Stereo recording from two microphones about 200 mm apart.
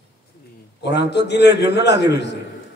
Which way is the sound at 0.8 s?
60° left (ahead or behind).